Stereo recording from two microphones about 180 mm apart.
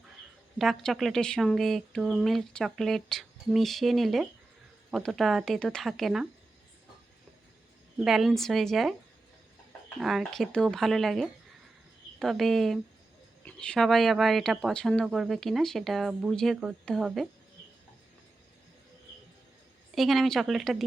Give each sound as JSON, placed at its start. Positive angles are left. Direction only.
{"t": 0.6, "sound": "speech", "side_deg": 0}
{"t": 7.9, "sound": "speech", "side_deg": 0}
{"t": 10.0, "sound": "speech", "side_deg": 0}
{"t": 20.0, "sound": "speech", "side_deg": 0}